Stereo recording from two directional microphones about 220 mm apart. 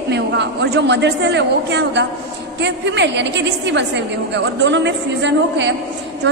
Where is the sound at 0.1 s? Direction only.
50° right (ahead or behind).